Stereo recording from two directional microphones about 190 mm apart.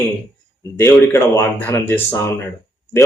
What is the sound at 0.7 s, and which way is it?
A man's voice, 15° left (ahead or behind).